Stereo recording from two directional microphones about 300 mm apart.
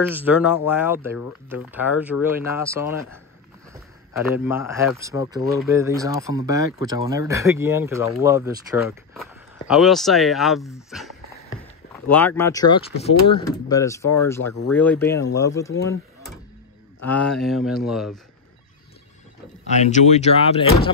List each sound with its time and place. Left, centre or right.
0.1 s speech: centre
17.0 s speech: centre
19.7 s speech: left